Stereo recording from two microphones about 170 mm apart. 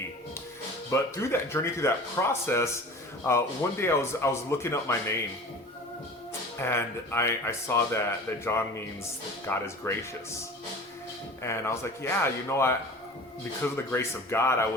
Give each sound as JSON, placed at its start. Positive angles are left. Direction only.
{"t": 0.9, "sound": "speech", "side_deg": 15}
{"t": 6.6, "sound": "speech", "side_deg": 15}
{"t": 11.4, "sound": "speech", "side_deg": 15}
{"t": 13.9, "sound": "speech", "side_deg": 15}